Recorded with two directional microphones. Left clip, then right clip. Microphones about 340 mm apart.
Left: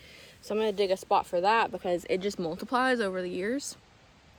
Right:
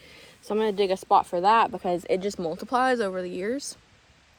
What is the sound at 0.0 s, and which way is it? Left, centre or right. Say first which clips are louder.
Speech: right 1 dB; centre.